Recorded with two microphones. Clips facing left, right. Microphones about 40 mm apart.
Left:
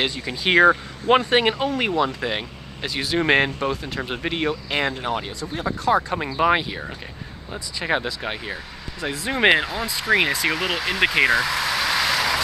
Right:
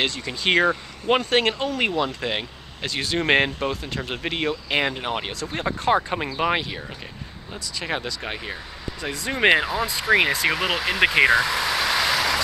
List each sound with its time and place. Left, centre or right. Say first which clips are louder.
0.0 s speech: even; centre
4.9 s speech: left 2 dB; centre
5.9 s speech: left 1 dB; right
6.2 s speech: left 4 dB; centre
7.8 s speech: left 5 dB; centre